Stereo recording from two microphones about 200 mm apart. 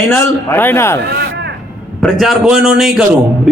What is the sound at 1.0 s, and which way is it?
Speech, 55° right (ahead or behind).